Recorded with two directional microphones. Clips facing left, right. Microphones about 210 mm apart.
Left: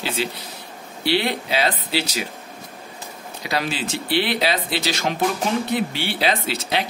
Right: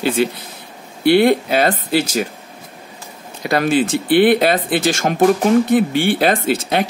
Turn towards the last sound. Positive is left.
turn(degrees=-50)  # may be behind; listen again after turning